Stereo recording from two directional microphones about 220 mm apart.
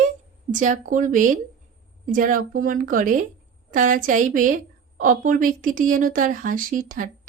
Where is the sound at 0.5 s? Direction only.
35° right (ahead or behind).